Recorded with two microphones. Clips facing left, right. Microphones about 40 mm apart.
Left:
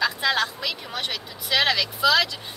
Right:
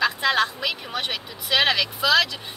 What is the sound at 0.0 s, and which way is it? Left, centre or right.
Speech, centre.